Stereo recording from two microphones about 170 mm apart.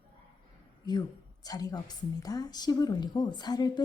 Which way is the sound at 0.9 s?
25° left (ahead or behind).